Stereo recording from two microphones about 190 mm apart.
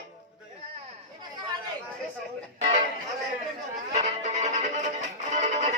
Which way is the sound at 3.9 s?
40° right (ahead or behind).